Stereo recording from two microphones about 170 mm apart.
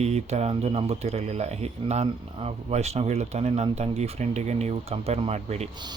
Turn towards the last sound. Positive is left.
turn(degrees=-40)  # may be behind; listen again after turning